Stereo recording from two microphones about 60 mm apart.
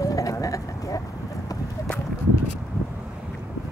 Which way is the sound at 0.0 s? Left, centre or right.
Left.